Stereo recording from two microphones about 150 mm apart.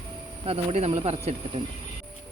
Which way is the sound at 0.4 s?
45° right (ahead or behind).